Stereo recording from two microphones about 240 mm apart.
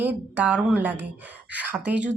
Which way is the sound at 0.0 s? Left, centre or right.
Centre.